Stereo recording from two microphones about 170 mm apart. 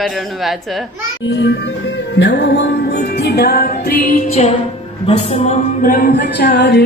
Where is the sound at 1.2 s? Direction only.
90° left; by 4.1 s 65° left (ahead or behind).